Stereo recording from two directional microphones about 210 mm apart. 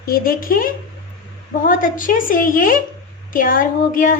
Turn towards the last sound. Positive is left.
turn(degrees=40)  # may be behind; listen again after turning